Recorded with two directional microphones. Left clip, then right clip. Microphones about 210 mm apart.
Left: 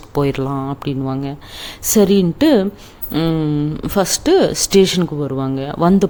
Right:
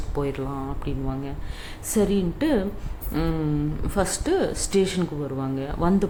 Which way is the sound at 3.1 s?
40° left (ahead or behind).